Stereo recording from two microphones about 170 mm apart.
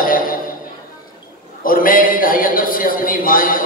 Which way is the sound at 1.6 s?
55° left (ahead or behind).